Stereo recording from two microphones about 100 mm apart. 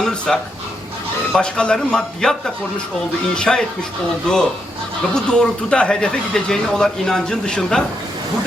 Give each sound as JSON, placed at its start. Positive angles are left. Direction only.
{"t": 0.0, "sound": "dog", "side_deg": 5}
{"t": 1.3, "sound": "speech", "side_deg": 10}